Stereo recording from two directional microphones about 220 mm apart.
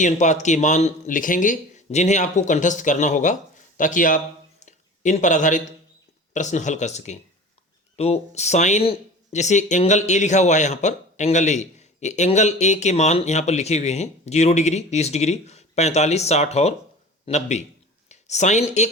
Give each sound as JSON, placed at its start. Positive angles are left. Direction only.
{"t": 0.0, "sound": "speech", "side_deg": 35}
{"t": 4.6, "sound": "a sound", "side_deg": 35}
{"t": 6.3, "sound": "speech", "side_deg": 35}